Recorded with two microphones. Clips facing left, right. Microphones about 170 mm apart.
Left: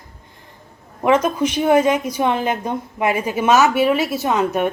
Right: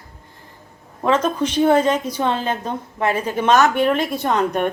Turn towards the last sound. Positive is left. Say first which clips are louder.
# left 1 dB
turn(degrees=5)  # may be behind; listen again after turning